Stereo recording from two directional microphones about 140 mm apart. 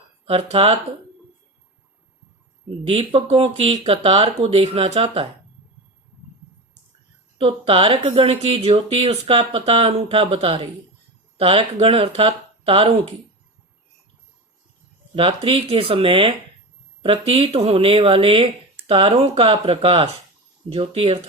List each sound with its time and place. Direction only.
0.5 s speech: 40° right (ahead or behind)
2.6 s speech: 45° right (ahead or behind)
7.3 s speech: 40° right (ahead or behind)
15.1 s speech: 40° right (ahead or behind)